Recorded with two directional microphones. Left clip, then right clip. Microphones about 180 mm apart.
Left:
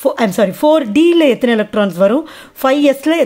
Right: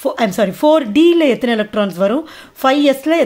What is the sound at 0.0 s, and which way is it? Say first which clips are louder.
Speech: left 2 dB; 15° left (ahead or behind).